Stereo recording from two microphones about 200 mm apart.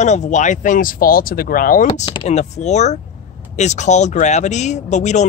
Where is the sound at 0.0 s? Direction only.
35° left (ahead or behind).